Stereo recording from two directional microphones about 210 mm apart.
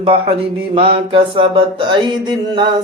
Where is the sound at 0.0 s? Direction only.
25° right (ahead or behind).